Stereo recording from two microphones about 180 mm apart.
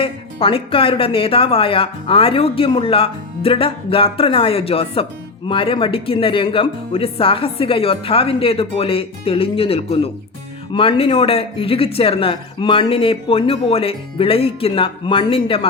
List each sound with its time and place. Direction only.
0.0 s speech: 30° left (ahead or behind)